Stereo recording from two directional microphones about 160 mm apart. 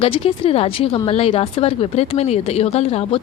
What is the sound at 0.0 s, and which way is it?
A woman's voice, 35° left (ahead or behind).